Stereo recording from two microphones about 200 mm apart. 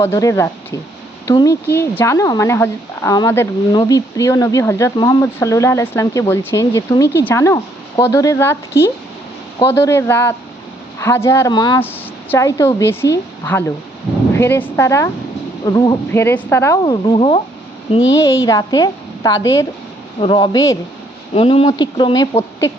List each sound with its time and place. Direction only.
0.0 s speech: 15° left (ahead or behind)
11.8 s speech: 10° left (ahead or behind); by 17.4 s 30° left (ahead or behind)
18.2 s speech: 15° left (ahead or behind)
21.3 s speech: 30° left (ahead or behind)